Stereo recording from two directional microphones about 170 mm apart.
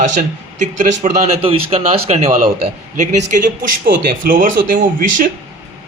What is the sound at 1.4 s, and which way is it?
A man's voice, 35° right (ahead or behind).